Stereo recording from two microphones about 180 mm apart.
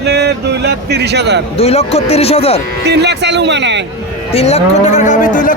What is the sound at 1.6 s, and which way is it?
Speech, 35° left (ahead or behind).